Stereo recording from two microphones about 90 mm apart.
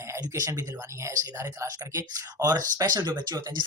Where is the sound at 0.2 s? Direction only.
40° right (ahead or behind).